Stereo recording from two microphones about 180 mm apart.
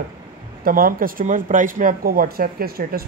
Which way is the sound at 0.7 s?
50° right (ahead or behind).